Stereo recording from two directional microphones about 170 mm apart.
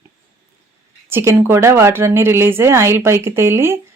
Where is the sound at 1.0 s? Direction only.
15° right (ahead or behind).